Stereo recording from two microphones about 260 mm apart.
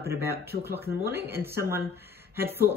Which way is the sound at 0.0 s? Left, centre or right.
Centre.